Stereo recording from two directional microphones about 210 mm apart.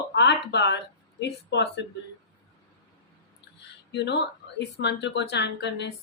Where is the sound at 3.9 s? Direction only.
55° left (ahead or behind).